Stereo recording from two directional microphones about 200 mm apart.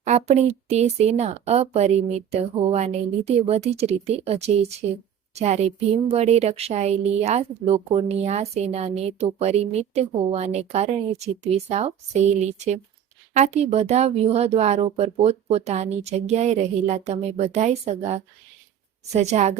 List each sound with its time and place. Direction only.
0.0 s speech: 35° right (ahead or behind)